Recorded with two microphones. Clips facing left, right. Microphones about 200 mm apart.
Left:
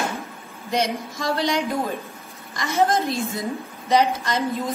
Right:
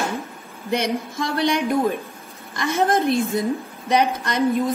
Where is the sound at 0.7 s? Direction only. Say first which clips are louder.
Right 1 dB; 55° right (ahead or behind).